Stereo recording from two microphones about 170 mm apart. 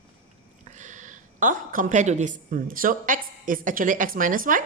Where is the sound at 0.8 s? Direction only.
45° right (ahead or behind).